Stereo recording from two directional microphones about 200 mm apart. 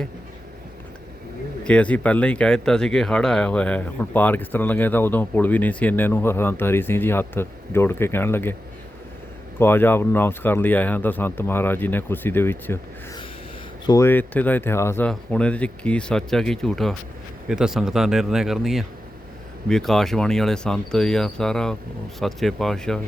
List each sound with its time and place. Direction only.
1.6 s speech: 5° left (ahead or behind)
9.6 s speech: 10° left (ahead or behind)
13.8 s speech: 15° left (ahead or behind)